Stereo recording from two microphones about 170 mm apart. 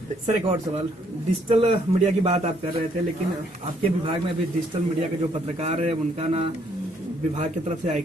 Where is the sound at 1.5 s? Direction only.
40° right (ahead or behind).